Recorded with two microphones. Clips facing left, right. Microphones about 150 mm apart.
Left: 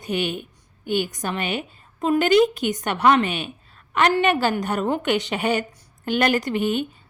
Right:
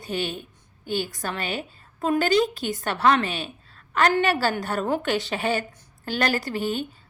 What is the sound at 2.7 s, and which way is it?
A woman's voice, 20° left (ahead or behind).